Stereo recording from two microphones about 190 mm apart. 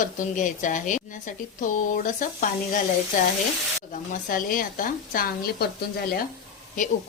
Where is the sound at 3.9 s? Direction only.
45° left (ahead or behind).